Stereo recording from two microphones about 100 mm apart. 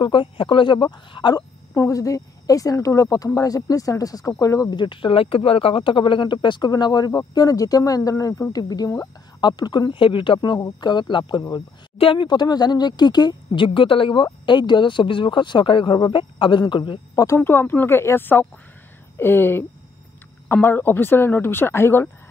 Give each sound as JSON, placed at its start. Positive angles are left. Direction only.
{"t": 0.0, "sound": "speech", "side_deg": 55}
{"t": 1.7, "sound": "speech", "side_deg": 30}
{"t": 4.7, "sound": "speech", "side_deg": 60}
{"t": 13.5, "sound": "speech", "side_deg": 60}
{"t": 17.4, "sound": "speech", "side_deg": 20}